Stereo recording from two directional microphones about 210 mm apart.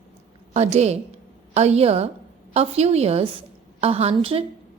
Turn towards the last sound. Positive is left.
turn(degrees=-25)  # may be behind; listen again after turning